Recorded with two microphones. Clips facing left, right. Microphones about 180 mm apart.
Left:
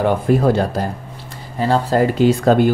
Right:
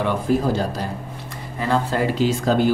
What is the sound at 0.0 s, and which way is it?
Speech, 60° left (ahead or behind).